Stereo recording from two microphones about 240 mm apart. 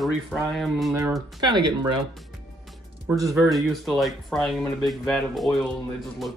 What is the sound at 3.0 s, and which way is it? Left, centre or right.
Speech, centre.